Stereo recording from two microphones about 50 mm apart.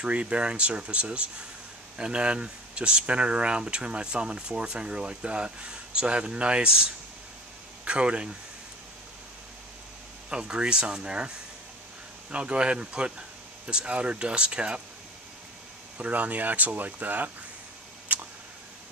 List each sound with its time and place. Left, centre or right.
0.0 s speech: right
10.3 s speech: centre
16.0 s speech: right
18.1 s a sound: right